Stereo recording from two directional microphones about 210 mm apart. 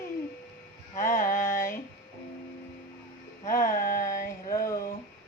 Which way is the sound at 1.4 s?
10° left (ahead or behind).